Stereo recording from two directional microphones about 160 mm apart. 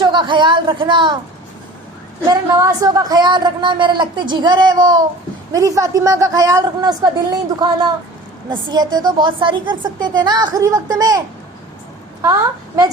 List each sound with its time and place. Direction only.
0.0 s a woman's voice: 30° right (ahead or behind)
2.5 s a woman's voice: 20° right (ahead or behind)
12.2 s a woman's voice: 25° right (ahead or behind)